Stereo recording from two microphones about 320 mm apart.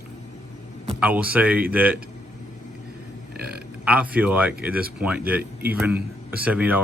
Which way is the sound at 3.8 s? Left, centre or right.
Centre.